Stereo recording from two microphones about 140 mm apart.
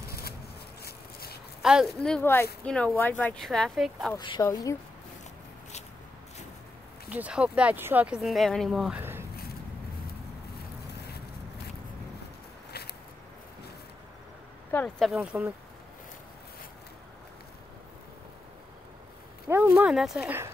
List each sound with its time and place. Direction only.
1.6 s speech: 5° right (ahead or behind)
2.0 s speech: 5° left (ahead or behind)
4.4 s speech: 20° left (ahead or behind)
7.1 s speech: 10° right (ahead or behind)
15.0 s speech: centre (ahead or behind)
19.4 s a sound: 15° right (ahead or behind)